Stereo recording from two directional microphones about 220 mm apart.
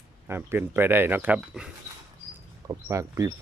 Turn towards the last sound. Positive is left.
turn(degrees=-15)  # may be behind; listen again after turning